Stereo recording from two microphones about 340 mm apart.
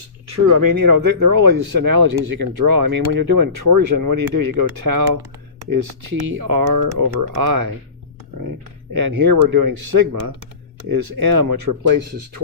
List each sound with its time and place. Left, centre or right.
0.5 s speech: right
6.3 s speech: right
8.4 s speech: right